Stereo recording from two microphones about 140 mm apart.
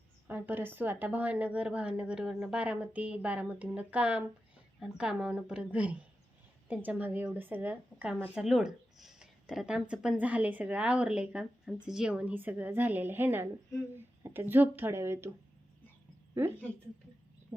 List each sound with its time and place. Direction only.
0.3 s speech: 15° right (ahead or behind)